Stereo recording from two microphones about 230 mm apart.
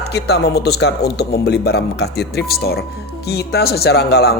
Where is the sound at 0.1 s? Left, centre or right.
Left.